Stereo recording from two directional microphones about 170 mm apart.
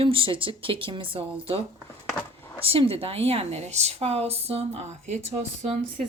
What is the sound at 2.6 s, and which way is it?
Speech, 35° right (ahead or behind).